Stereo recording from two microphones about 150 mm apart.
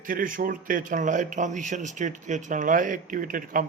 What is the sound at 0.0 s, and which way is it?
Speech, 65° right (ahead or behind).